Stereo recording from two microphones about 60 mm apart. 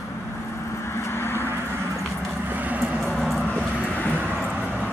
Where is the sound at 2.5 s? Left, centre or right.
Right.